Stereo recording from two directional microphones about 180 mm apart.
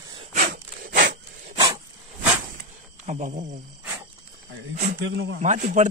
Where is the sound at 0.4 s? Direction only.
55° right (ahead or behind).